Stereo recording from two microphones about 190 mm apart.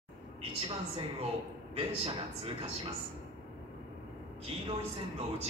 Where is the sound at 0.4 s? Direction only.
30° right (ahead or behind).